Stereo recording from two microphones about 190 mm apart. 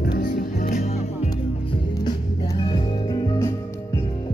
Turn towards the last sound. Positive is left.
turn(degrees=15)  # may be behind; listen again after turning